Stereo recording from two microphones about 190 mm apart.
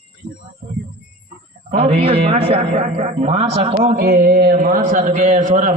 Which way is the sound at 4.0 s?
55° right (ahead or behind).